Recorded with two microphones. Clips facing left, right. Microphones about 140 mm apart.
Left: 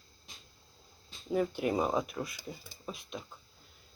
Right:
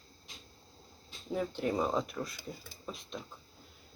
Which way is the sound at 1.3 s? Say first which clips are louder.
Left 3 dB; 10° left (ahead or behind).